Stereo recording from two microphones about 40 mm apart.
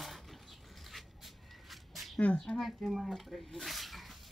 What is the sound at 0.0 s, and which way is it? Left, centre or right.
Cupboard open or close, centre.